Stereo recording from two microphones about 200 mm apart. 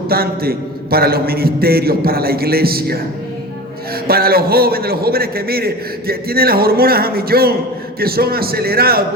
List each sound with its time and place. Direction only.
0.1 s a man's voice: 50° right (ahead or behind)
4.0 s a man's voice: 50° right (ahead or behind)